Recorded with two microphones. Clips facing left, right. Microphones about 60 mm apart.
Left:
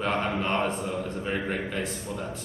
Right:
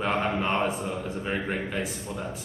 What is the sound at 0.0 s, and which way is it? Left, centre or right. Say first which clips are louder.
A man's voice: right 1 dB; centre.